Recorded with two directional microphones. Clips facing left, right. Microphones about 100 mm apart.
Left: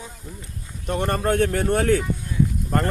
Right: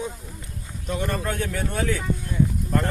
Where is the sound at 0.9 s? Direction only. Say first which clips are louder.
Left 5 dB; 55° left (ahead or behind).